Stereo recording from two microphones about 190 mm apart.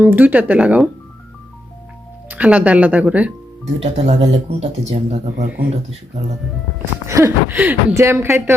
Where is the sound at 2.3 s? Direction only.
5° right (ahead or behind).